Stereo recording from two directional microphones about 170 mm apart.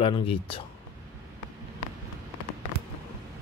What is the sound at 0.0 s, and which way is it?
Speech, 30° left (ahead or behind).